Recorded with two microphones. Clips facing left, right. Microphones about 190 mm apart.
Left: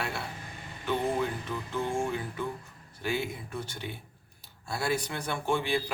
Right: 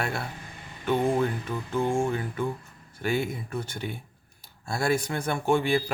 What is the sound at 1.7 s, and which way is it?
A man's voice, 50° right (ahead or behind).